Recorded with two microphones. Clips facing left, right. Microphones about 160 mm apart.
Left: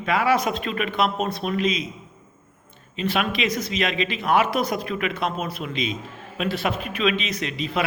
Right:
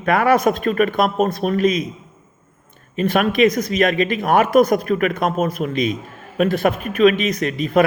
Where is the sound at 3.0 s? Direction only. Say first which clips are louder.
Right 8 dB; 50° right (ahead or behind).